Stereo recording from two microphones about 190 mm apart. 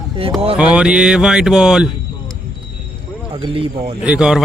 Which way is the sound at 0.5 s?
5° right (ahead or behind).